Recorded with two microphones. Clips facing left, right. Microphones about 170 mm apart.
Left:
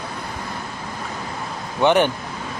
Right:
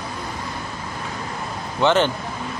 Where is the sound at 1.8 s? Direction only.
15° left (ahead or behind).